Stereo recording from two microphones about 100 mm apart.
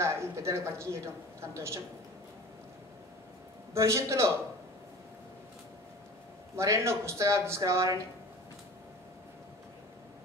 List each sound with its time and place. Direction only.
0.0 s speech: 25° right (ahead or behind)
3.7 s speech: 30° right (ahead or behind)
6.5 s speech: 30° right (ahead or behind)